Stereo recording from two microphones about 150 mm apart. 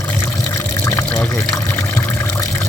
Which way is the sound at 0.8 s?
15° left (ahead or behind).